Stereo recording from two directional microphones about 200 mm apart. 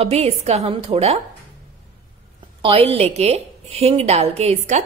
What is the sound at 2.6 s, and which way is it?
Speech, 30° right (ahead or behind).